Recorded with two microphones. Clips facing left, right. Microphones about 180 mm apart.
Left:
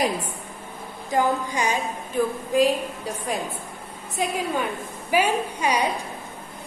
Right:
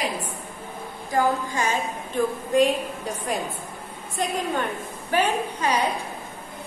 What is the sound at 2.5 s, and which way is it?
A woman's voice, centre (ahead or behind).